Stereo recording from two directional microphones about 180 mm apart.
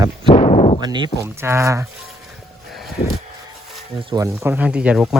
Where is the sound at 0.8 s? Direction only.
25° right (ahead or behind).